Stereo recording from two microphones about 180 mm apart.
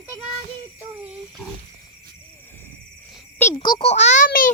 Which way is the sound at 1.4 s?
Centre (ahead or behind).